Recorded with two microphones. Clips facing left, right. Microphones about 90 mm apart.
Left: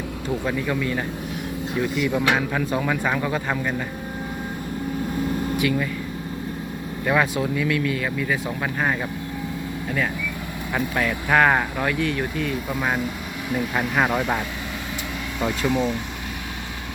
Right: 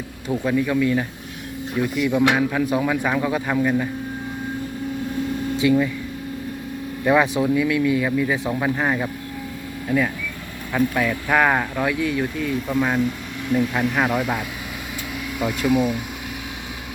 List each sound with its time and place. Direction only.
0.3 s speech: 5° right (ahead or behind)
5.5 s speech: 20° right (ahead or behind)
7.0 s speech: 15° right (ahead or behind)
10.8 s speech: 10° left (ahead or behind); by 16.0 s 10° right (ahead or behind)